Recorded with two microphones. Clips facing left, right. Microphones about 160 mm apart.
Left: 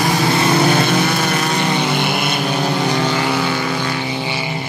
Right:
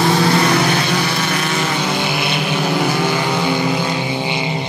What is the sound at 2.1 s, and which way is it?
Vehicle, 50° left (ahead or behind).